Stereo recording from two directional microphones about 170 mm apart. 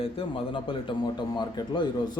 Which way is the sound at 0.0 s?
30° left (ahead or behind).